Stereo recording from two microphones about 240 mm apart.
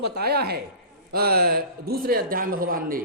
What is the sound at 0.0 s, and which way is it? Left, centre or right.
Speech, right.